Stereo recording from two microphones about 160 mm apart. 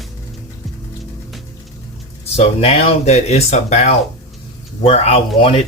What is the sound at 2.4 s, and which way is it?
Speech, 40° left (ahead or behind).